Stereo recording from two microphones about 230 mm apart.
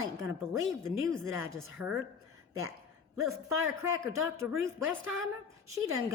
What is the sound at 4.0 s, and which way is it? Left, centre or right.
A woman's voice, centre.